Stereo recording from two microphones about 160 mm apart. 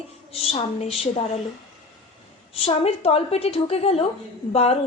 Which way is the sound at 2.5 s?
40° left (ahead or behind).